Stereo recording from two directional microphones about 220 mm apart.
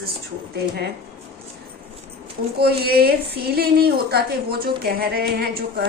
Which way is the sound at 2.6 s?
45° right (ahead or behind).